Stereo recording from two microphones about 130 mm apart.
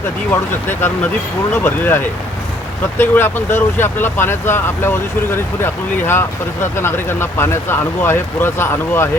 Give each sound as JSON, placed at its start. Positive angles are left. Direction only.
{"t": 0.3, "sound": "speech", "side_deg": 15}